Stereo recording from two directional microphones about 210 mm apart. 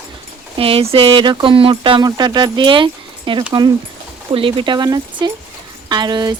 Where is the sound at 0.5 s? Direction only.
25° right (ahead or behind).